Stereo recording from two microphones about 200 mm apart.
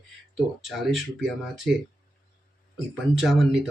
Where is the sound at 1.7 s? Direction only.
50° right (ahead or behind).